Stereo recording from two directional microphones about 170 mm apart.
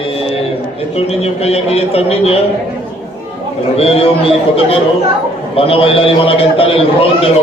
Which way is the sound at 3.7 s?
35° left (ahead or behind).